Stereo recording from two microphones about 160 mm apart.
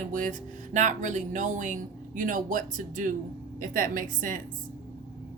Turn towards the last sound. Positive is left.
turn(degrees=-55)  # may be behind; listen again after turning